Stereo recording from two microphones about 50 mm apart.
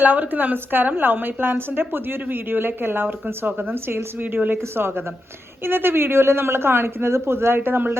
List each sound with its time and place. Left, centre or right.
0.0 s a woman's voice: right